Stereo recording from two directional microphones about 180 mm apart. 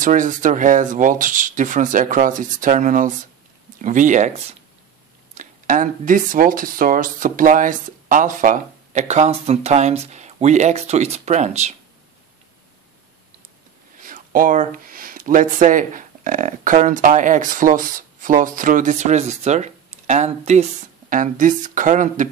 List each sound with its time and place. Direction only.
0.0 s speech: 45° right (ahead or behind)
13.9 s speech: 50° right (ahead or behind)